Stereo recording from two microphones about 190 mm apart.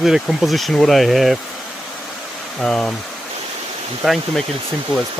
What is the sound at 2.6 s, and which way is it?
Speech, 5° left (ahead or behind).